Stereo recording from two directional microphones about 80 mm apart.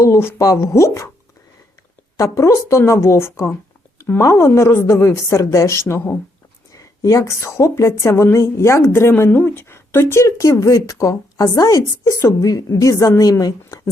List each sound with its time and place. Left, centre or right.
0.0 s a woman's voice: left
2.1 s a woman's voice: left